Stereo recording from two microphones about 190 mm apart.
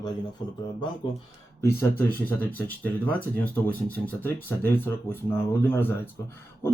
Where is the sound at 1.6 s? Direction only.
15° left (ahead or behind).